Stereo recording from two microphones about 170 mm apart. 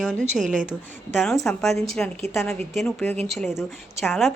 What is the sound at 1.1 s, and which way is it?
A woman's voice, centre (ahead or behind).